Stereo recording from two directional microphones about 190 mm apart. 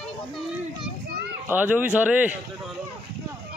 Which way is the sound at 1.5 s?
10° right (ahead or behind).